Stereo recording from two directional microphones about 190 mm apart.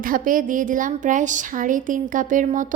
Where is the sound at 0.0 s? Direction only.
45° right (ahead or behind).